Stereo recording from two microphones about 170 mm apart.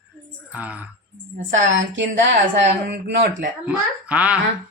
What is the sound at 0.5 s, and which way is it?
Speech, 10° right (ahead or behind).